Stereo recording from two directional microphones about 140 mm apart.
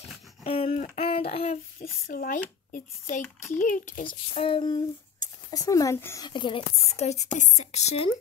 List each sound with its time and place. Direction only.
0.4 s a sound: 45° left (ahead or behind)
0.7 s a sound: 65° left (ahead or behind)
1.0 s speech: 45° left (ahead or behind)
1.8 s speech: 90° left
3.2 s a child's voice: 15° left (ahead or behind)
3.5 s speech: 70° left (ahead or behind)
4.3 s speech: 40° left (ahead or behind); by 6.2 s 20° left (ahead or behind)
6.2 s speech: 35° left (ahead or behind)